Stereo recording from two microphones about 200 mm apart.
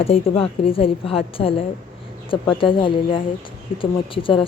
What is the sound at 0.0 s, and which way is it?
A woman's voice, 30° left (ahead or behind).